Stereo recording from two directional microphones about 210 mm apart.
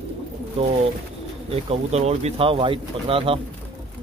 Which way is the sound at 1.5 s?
30° right (ahead or behind).